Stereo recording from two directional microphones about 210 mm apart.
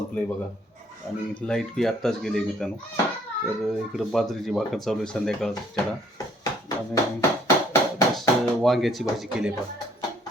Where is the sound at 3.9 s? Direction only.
Centre (ahead or behind).